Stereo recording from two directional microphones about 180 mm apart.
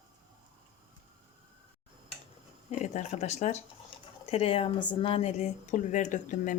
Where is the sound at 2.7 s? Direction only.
40° left (ahead or behind).